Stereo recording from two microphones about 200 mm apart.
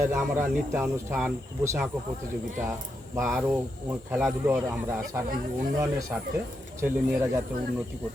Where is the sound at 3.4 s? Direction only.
10° right (ahead or behind).